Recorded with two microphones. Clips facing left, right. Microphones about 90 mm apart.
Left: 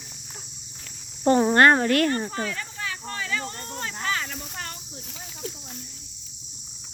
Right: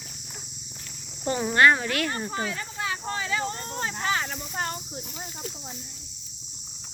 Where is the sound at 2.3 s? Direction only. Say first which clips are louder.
Even; 10° right (ahead or behind).